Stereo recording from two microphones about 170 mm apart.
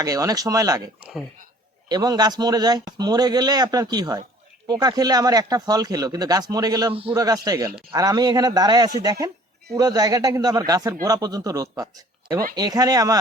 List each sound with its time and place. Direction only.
0.0 s speech: 20° right (ahead or behind)
1.9 s speech: 25° right (ahead or behind)